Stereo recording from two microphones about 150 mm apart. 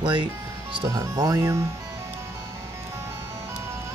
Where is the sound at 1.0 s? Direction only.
20° right (ahead or behind).